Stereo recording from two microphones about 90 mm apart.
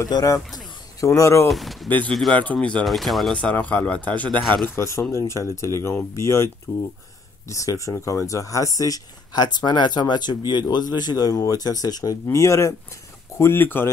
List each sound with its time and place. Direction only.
0.0 s speech: 40° left (ahead or behind)
1.5 s speech: centre (ahead or behind)
1.9 s speech: 20° left (ahead or behind)
2.8 s speech: centre (ahead or behind)
3.3 s speech: 15° left (ahead or behind)
4.3 s speech: 60° right (ahead or behind)
4.6 s speech: 30° left (ahead or behind)